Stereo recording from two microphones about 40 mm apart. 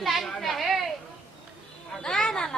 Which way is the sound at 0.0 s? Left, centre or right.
Centre.